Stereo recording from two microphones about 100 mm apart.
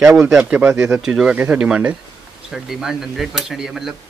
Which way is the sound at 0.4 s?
15° right (ahead or behind).